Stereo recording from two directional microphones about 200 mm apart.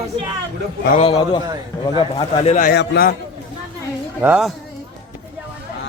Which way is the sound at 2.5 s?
50° left (ahead or behind).